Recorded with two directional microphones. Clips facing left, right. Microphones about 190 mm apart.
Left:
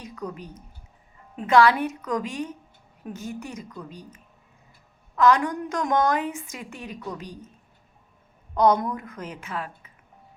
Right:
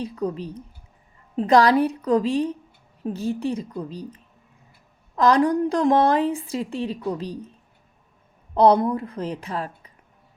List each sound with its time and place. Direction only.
0.0 s a woman's voice: 30° right (ahead or behind)
8.5 s a woman's voice: 30° right (ahead or behind)